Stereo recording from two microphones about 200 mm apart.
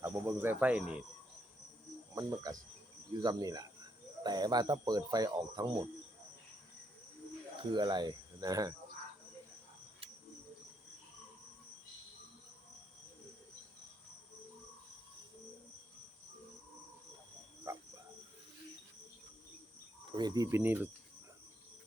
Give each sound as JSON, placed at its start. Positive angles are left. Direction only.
{"t": 0.0, "sound": "speech", "side_deg": -10}
{"t": 2.1, "sound": "speech", "side_deg": -15}
{"t": 7.6, "sound": "speech", "side_deg": -20}
{"t": 17.7, "sound": "a sound", "side_deg": -15}
{"t": 20.1, "sound": "speech", "side_deg": -20}